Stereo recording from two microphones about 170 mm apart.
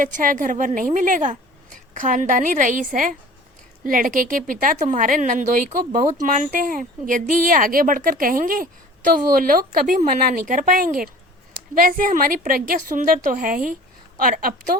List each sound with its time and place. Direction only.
0.0 s a woman's voice: 50° right (ahead or behind)